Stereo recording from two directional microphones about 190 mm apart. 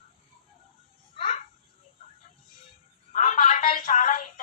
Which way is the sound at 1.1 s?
30° left (ahead or behind).